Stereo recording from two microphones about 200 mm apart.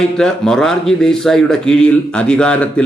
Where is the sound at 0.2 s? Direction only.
5° left (ahead or behind).